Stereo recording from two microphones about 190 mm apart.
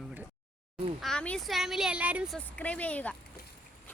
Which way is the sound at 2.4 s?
10° left (ahead or behind).